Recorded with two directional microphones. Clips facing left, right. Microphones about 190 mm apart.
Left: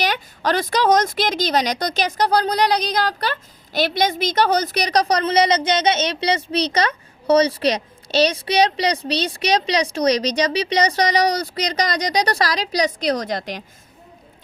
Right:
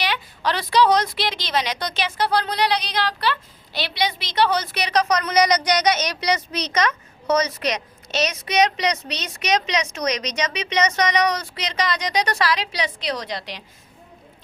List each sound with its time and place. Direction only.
0.0 s a woman's voice: 45° left (ahead or behind)